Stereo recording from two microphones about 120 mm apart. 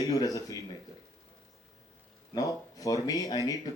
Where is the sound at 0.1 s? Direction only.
30° left (ahead or behind).